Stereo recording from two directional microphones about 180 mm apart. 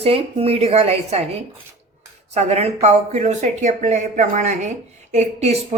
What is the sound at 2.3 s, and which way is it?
A woman's voice, 35° right (ahead or behind).